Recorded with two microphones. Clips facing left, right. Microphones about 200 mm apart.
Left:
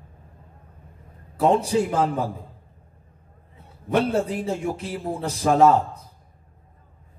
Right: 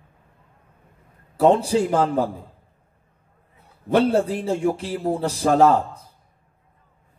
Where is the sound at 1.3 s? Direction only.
30° right (ahead or behind).